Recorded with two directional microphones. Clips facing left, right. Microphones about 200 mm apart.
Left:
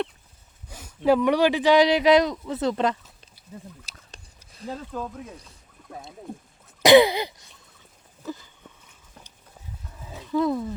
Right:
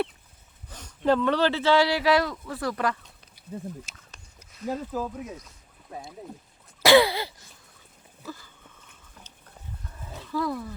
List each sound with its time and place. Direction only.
0.7 s speech: 10° left (ahead or behind)
3.8 s a sound: 35° left (ahead or behind)
4.6 s speech: 5° right (ahead or behind)
6.8 s throat clearing: 20° left (ahead or behind)
10.0 s a sound: 5° left (ahead or behind)
10.3 s speech: 20° left (ahead or behind)